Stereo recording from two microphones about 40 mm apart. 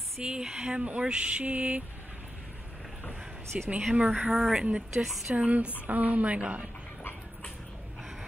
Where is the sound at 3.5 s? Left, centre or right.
Right.